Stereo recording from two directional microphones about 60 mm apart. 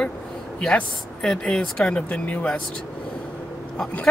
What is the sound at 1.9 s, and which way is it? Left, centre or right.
Speech, left.